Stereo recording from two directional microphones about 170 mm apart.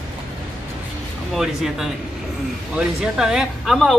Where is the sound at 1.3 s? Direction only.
Centre (ahead or behind).